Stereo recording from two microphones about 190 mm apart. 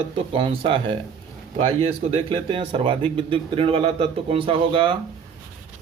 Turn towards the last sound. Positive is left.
turn(degrees=-30)  # may be behind; listen again after turning